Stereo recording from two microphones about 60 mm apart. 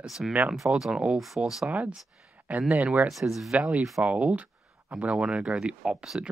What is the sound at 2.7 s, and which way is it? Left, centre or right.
Speech, right.